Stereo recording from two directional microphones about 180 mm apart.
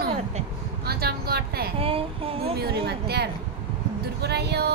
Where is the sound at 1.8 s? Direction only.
30° right (ahead or behind).